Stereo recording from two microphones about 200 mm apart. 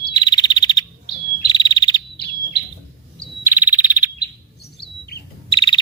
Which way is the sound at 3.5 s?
10° right (ahead or behind).